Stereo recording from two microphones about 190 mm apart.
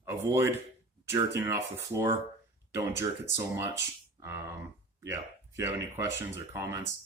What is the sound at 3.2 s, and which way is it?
Speech, 15° right (ahead or behind).